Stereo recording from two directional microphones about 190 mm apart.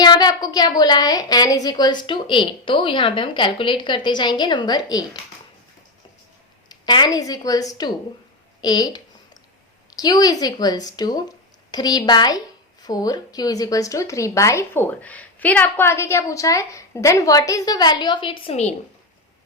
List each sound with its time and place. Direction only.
0.0 s a woman's voice: 20° left (ahead or behind)
6.7 s a woman's voice: 20° left (ahead or behind)
8.6 s a sound: 20° left (ahead or behind)
9.9 s a woman's voice: 20° left (ahead or behind)